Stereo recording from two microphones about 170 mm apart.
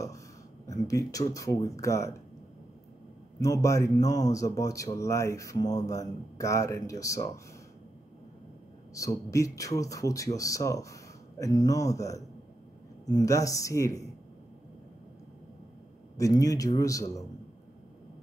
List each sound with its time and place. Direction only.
0.7 s speech: 20° left (ahead or behind)
3.3 s speech: 20° left (ahead or behind)
8.9 s speech: 20° left (ahead or behind)
16.2 s speech: 20° left (ahead or behind)